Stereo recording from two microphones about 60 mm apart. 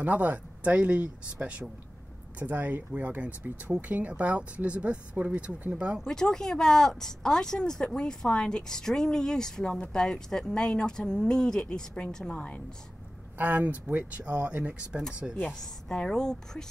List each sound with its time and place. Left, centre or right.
0.0 s speech: right
6.0 s speech: centre
13.4 s speech: right
15.4 s speech: centre